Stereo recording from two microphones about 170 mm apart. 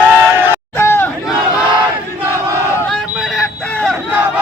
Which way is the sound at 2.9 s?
Centre (ahead or behind).